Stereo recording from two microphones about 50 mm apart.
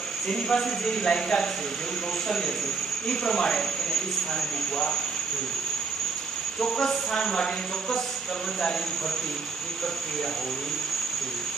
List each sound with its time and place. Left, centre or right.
0.3 s speech: centre
6.6 s speech: centre